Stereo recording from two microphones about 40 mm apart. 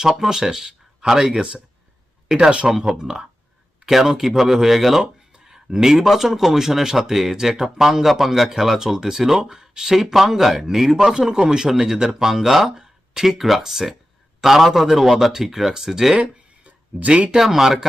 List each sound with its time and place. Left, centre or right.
0.2 s a man's voice: centre
16.6 s a sound: right
17.3 s a man's voice: centre